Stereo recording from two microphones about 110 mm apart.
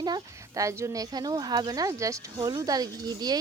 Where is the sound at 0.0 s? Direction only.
35° right (ahead or behind).